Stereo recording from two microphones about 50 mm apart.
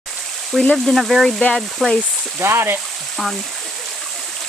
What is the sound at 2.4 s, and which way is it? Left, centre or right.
Speech, right.